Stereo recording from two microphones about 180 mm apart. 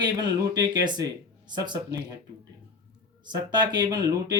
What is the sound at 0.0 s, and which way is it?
Speech, 25° right (ahead or behind).